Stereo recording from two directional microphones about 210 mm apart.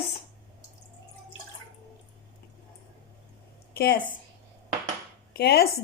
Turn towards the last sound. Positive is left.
turn(degrees=50)  # may be behind; listen again after turning